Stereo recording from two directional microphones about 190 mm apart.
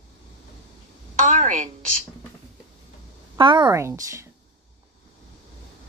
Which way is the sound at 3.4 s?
25° right (ahead or behind).